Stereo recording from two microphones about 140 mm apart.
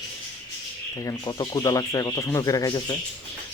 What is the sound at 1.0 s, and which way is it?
Speech, 25° left (ahead or behind).